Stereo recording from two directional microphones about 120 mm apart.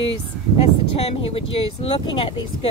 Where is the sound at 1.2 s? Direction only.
50° left (ahead or behind).